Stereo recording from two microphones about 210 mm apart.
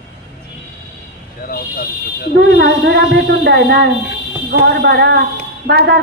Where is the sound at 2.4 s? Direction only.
50° right (ahead or behind).